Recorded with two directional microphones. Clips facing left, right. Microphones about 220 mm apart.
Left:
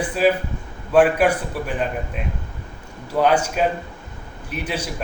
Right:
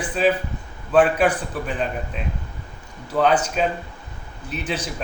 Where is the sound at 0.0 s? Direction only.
10° left (ahead or behind).